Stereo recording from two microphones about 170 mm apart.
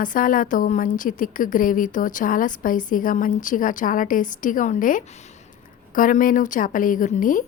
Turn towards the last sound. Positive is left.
turn(degrees=50)  # may be behind; listen again after turning